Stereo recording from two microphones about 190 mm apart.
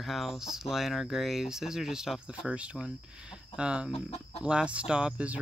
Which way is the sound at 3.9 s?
30° left (ahead or behind).